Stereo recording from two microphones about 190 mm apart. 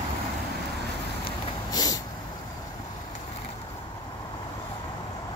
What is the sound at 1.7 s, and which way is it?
Vehicle, 20° left (ahead or behind).